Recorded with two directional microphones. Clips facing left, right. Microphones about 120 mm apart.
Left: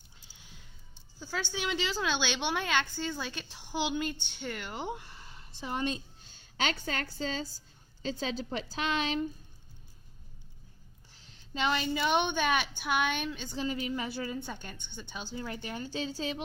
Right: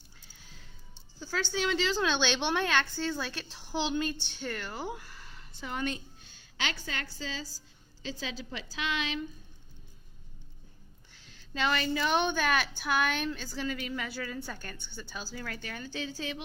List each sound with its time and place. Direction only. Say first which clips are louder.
1.2 s a woman's voice: right 3 dB; 15° left (ahead or behind)
6.3 s a sound: left 4 dB; 40° left (ahead or behind)
6.8 s a woman's voice: left 4 dB; 40° left (ahead or behind)
11.1 s a woman's voice: even; 25° left (ahead or behind)